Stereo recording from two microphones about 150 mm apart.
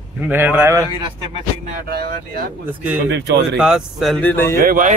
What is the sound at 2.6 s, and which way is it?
Speech, 10° right (ahead or behind).